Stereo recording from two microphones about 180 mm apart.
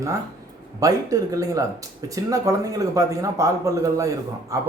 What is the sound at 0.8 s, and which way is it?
A man's voice, 20° right (ahead or behind).